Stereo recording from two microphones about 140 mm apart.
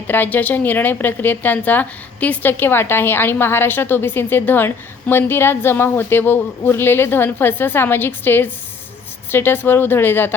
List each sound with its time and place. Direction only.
0.1 s a woman's voice: 15° left (ahead or behind)